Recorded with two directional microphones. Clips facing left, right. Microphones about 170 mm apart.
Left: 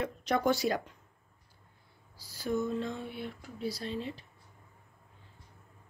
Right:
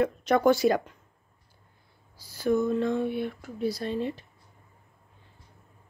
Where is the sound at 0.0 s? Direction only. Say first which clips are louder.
Right 7 dB; 55° right (ahead or behind).